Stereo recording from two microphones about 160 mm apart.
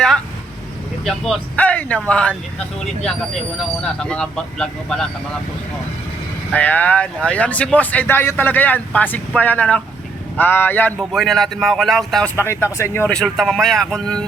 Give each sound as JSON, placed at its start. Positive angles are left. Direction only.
{"t": 1.0, "sound": "speech", "side_deg": 0}
{"t": 3.6, "sound": "speech", "side_deg": 5}
{"t": 6.5, "sound": "speech", "side_deg": 10}
{"t": 12.4, "sound": "speech", "side_deg": 15}